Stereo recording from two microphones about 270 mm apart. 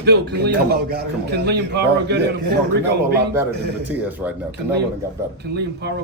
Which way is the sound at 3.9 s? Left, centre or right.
Centre.